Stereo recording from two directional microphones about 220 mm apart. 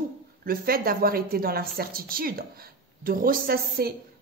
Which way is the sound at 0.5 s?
40° right (ahead or behind).